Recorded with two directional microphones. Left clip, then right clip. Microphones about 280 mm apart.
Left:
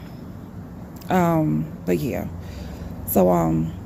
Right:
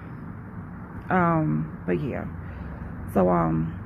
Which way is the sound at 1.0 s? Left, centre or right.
Centre.